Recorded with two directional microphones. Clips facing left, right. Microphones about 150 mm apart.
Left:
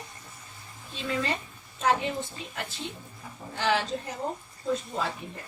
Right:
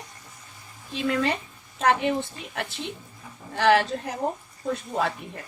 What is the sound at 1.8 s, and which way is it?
Speech, 65° right (ahead or behind).